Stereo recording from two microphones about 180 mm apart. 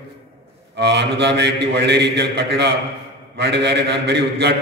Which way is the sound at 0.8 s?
70° right (ahead or behind).